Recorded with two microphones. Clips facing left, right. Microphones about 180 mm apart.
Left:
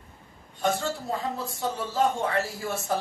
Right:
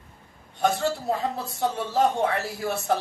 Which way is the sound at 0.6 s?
65° right (ahead or behind).